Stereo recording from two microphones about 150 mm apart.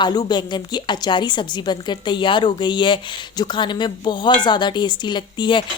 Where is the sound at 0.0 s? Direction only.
25° left (ahead or behind).